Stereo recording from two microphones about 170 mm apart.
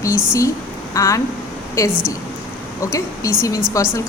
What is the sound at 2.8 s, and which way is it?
Speech, 15° left (ahead or behind).